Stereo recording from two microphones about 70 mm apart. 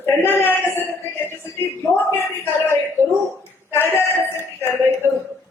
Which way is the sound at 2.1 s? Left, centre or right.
Left.